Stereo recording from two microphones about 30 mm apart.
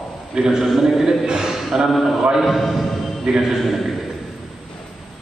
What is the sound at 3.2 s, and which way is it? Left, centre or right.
Speech, centre.